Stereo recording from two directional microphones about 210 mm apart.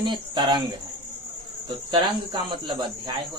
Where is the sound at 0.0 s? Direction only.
20° right (ahead or behind).